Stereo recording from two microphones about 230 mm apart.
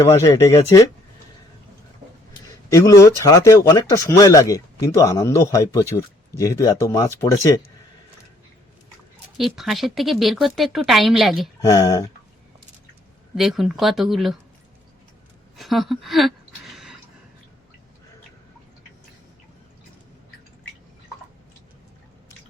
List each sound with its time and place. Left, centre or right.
0.0 s speech: centre
2.6 s speech: centre
9.4 s speech: centre
11.6 s speech: centre
13.3 s speech: centre
15.5 s a sound: centre